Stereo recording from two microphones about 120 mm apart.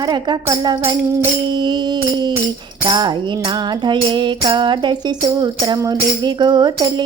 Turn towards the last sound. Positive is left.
turn(degrees=-35)  # may be behind; listen again after turning